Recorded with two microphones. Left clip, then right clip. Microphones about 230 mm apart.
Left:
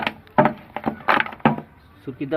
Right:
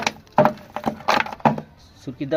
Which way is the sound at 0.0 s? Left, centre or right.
Centre.